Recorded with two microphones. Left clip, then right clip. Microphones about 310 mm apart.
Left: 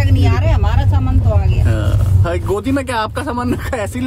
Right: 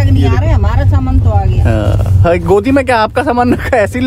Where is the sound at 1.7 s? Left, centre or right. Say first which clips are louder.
Right 9 dB; right.